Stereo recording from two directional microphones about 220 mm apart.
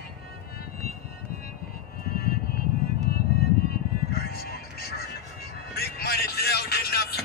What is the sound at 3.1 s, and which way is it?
Music, 45° left (ahead or behind).